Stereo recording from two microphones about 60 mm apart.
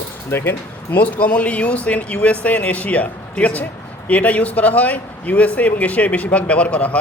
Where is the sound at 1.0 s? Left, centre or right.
Left.